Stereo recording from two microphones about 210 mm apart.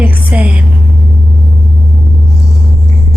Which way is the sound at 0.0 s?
5° right (ahead or behind).